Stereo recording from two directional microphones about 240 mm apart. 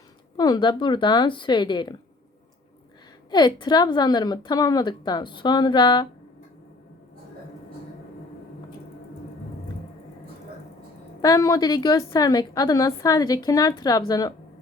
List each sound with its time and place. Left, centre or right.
0.3 s speech: centre
3.2 s a woman's voice: centre
11.2 s a woman's voice: centre